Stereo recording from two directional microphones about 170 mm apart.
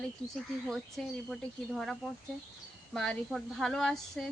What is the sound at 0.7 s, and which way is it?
A woman's voice, centre (ahead or behind).